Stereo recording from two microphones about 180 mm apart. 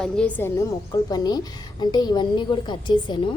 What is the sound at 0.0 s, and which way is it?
Speech, 5° left (ahead or behind).